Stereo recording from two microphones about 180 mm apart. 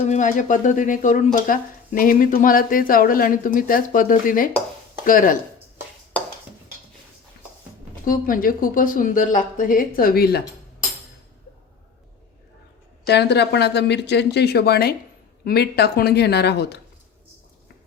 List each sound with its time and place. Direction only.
0.1 s speech: 45° left (ahead or behind)
8.0 s speech: 50° left (ahead or behind)
13.1 s speech: 70° left (ahead or behind)